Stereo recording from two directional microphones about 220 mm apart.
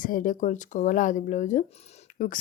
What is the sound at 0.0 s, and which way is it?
Speech, 40° left (ahead or behind).